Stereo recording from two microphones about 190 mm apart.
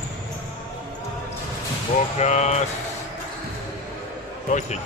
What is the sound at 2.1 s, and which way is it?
Speech, 35° left (ahead or behind).